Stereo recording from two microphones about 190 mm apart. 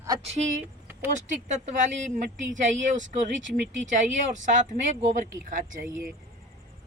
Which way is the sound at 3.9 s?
40° right (ahead or behind).